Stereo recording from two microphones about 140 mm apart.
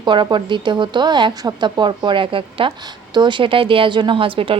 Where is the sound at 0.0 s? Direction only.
35° right (ahead or behind).